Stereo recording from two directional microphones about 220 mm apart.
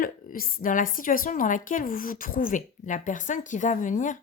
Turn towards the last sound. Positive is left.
turn(degrees=35)  # may be behind; listen again after turning